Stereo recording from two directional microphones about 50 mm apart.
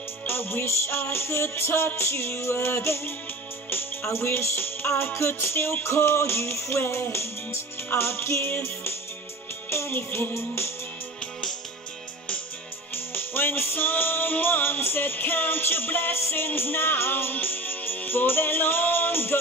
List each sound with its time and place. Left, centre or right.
0.3 s music: left
9.7 s music: left
12.9 s music: left